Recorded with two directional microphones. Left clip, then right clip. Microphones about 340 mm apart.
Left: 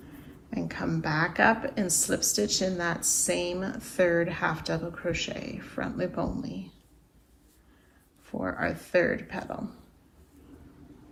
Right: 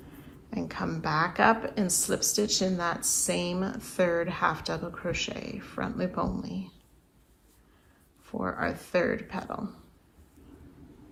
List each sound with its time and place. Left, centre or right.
0.5 s speech: centre
8.2 s speech: centre